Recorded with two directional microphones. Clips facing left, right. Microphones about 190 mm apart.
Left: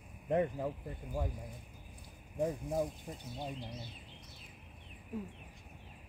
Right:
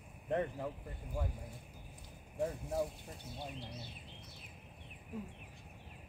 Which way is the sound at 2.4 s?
15° left (ahead or behind).